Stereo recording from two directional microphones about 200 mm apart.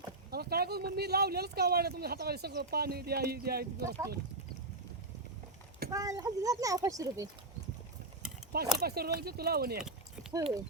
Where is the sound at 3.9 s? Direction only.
15° right (ahead or behind).